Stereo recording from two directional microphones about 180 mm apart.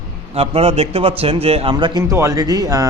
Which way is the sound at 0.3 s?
35° right (ahead or behind).